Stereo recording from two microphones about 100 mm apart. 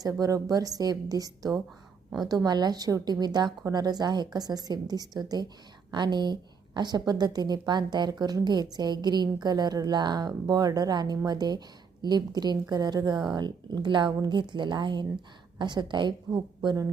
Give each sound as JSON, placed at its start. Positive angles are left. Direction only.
{"t": 0.0, "sound": "a woman's voice", "side_deg": -35}